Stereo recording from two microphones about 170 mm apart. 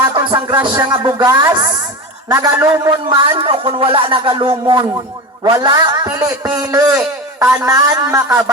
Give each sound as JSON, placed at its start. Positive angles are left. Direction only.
{"t": 0.1, "sound": "music", "side_deg": -30}
{"t": 1.0, "sound": "a man's voice", "side_deg": -20}
{"t": 3.1, "sound": "a man's voice", "side_deg": -30}